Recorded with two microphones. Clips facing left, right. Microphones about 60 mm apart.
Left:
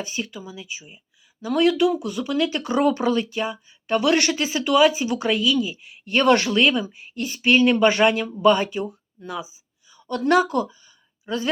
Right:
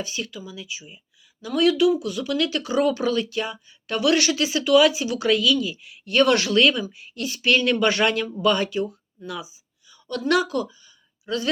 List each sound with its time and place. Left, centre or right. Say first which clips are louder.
0.0 s speech: left 1 dB; left
2.6 s speech: left 2 dB; left
3.3 s speech: left 1 dB; left
4.1 s speech: even; left
6.5 s speech: even; centre
9.9 s speech: left 3 dB; left